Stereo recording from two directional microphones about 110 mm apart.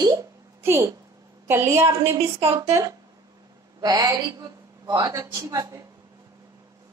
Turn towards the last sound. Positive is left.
turn(degrees=-30)  # may be behind; listen again after turning